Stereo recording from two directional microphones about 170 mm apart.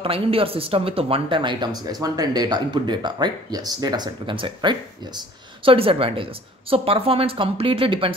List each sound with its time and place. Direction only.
0.0 s speech: 35° right (ahead or behind)